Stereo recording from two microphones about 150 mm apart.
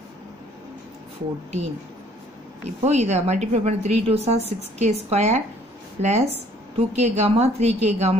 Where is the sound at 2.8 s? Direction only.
50° right (ahead or behind).